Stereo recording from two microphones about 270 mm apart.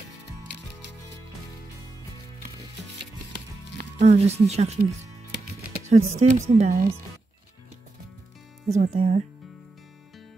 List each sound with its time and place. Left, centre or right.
4.0 s speech: right
5.3 s music: right
6.5 s speech: right
8.7 s speech: right